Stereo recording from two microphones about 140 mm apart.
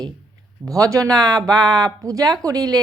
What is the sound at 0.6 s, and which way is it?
Speech, 25° right (ahead or behind).